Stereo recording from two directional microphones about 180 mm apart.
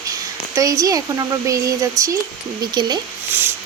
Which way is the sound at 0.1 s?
20° right (ahead or behind).